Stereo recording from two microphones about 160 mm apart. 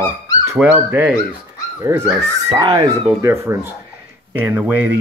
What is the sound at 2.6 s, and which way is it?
Speech, 25° right (ahead or behind).